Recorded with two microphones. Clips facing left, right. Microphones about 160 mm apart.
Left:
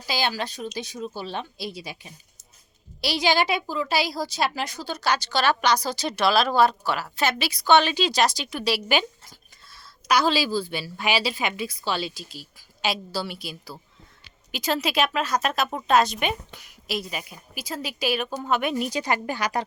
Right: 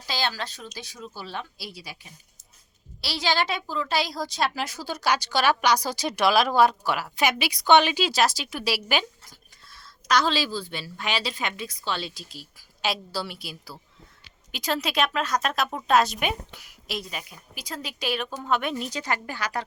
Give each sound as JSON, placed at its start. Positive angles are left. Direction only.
{"t": 0.1, "sound": "a woman's voice", "side_deg": 10}